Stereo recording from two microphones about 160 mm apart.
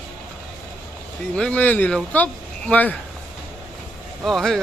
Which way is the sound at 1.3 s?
5° left (ahead or behind).